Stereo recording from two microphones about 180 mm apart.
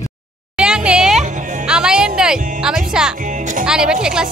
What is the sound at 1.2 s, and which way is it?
Music, 40° right (ahead or behind).